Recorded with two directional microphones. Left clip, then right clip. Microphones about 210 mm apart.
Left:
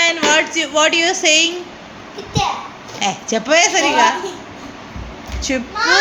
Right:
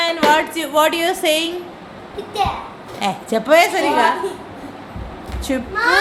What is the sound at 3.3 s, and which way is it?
Speech, 10° right (ahead or behind).